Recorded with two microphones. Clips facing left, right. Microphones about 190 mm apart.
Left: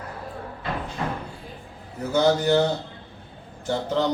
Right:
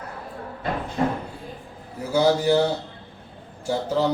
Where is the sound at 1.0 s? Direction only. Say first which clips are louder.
Right 8 dB; 35° right (ahead or behind).